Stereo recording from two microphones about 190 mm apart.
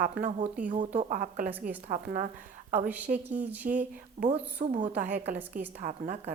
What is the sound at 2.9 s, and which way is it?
Speech, 10° right (ahead or behind).